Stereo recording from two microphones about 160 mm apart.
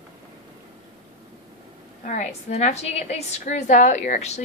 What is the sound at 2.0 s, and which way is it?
A woman's voice, 50° left (ahead or behind).